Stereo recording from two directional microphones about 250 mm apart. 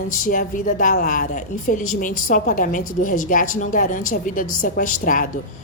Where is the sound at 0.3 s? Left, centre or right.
Left.